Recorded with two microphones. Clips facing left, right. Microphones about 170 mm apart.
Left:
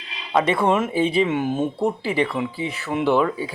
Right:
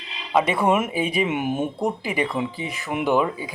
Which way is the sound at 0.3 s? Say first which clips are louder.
Left 1 dB; 10° right (ahead or behind).